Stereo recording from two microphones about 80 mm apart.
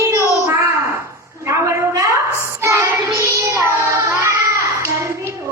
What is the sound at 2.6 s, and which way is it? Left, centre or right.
Child singing, right.